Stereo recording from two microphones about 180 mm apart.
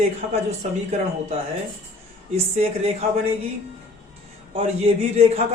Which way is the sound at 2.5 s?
35° right (ahead or behind).